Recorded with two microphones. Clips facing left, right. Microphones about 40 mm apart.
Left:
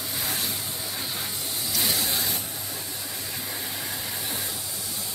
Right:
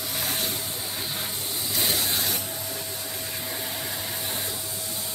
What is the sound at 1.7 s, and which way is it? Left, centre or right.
Vehicle, right.